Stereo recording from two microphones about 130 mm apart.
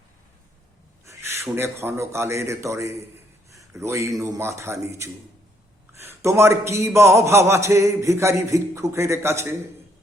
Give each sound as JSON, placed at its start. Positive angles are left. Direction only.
{"t": 1.0, "sound": "a man's voice", "side_deg": -20}
{"t": 3.5, "sound": "a sound", "side_deg": -25}
{"t": 4.2, "sound": "a man's voice", "side_deg": -25}